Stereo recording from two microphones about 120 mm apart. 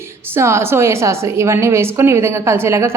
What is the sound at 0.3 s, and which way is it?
A woman's voice, 20° right (ahead or behind).